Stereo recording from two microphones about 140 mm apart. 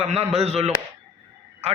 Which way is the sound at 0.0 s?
50° right (ahead or behind).